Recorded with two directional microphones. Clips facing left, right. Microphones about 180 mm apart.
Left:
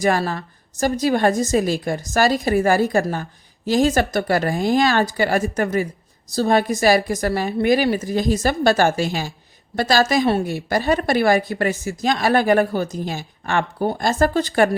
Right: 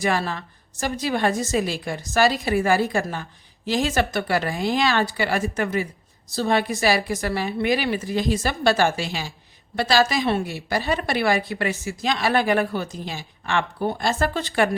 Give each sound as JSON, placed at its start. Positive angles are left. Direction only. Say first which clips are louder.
{"t": 0.0, "sound": "a woman's voice", "louder": "left 4 dB", "side_deg": 40}